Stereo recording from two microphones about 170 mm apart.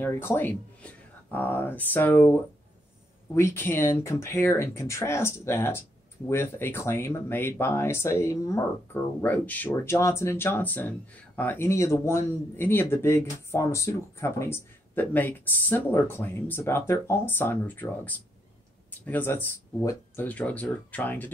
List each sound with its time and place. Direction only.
0.0 s speech: 15° left (ahead or behind)